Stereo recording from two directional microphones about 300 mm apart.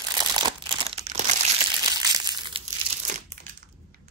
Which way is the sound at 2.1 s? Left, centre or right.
Centre.